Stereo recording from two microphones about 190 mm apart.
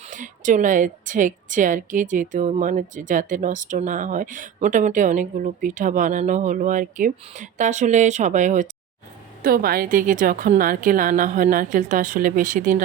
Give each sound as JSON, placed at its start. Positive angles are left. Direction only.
{"t": 0.1, "sound": "a woman's voice", "side_deg": -40}
{"t": 9.4, "sound": "a woman's voice", "side_deg": -50}